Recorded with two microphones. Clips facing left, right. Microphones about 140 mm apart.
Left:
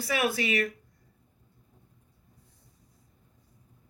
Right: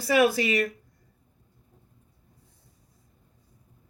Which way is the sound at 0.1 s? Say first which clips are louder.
Right 7 dB; 35° right (ahead or behind).